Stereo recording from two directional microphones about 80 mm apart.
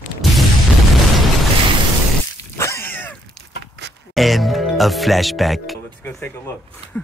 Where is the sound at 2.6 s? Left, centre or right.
Left.